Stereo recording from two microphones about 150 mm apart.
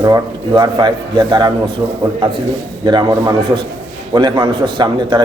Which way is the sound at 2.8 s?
30° right (ahead or behind).